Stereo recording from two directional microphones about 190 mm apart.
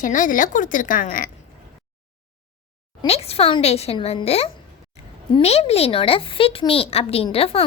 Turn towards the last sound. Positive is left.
turn(degrees=30)  # may be behind; listen again after turning